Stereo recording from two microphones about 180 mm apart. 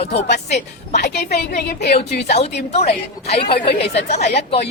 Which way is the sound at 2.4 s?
35° left (ahead or behind).